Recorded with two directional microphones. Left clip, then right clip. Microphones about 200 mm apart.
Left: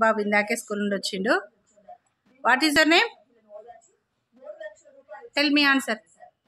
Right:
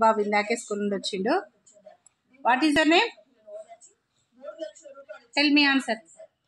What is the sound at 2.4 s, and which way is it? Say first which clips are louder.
Speech: left 2 dB; 25° left (ahead or behind).